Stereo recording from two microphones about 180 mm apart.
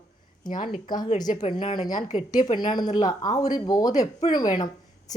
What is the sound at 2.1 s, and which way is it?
Speech, 40° left (ahead or behind).